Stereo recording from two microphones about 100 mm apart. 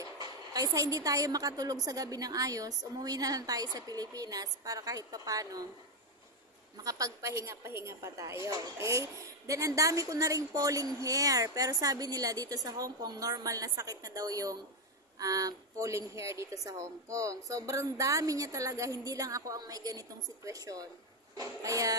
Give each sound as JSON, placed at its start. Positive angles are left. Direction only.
{"t": 0.2, "sound": "a woman's voice", "side_deg": -40}
{"t": 6.8, "sound": "a woman's voice", "side_deg": -35}